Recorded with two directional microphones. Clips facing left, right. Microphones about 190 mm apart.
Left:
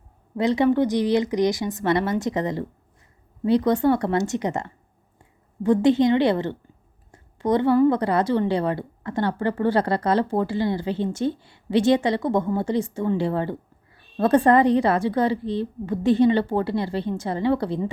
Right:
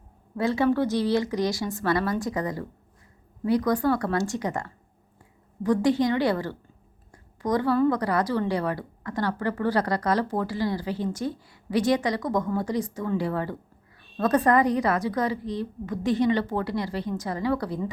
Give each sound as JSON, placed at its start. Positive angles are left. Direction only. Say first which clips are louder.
{"t": 0.3, "sound": "a woman's voice", "louder": "left 4 dB", "side_deg": 20}